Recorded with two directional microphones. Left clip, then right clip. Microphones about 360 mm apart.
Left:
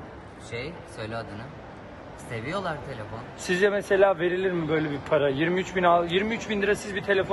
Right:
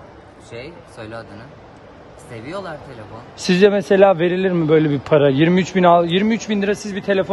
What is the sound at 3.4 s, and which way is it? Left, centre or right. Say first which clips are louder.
A man's voice: right 9 dB; right.